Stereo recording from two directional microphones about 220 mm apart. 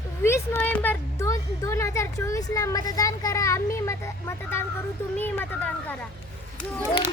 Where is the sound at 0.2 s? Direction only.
10° left (ahead or behind).